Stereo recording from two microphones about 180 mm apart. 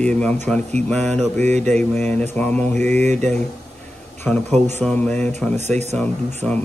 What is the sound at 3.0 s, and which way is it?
Speech, 40° right (ahead or behind).